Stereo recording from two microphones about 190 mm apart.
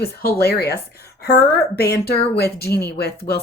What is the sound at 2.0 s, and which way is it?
A woman's voice, 55° left (ahead or behind).